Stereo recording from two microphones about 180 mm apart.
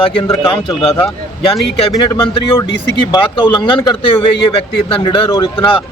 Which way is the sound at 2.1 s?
25° left (ahead or behind).